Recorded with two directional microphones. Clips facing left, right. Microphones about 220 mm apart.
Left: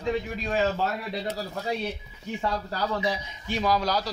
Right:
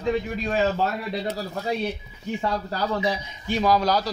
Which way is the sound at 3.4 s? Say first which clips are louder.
Right 4 dB; 40° right (ahead or behind).